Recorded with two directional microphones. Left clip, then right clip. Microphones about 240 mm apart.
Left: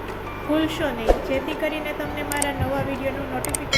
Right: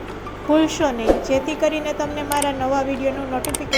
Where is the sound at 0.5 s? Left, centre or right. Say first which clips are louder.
Right 6 dB; centre.